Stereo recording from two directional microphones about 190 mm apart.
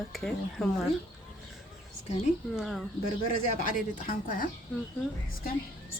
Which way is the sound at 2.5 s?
Centre (ahead or behind).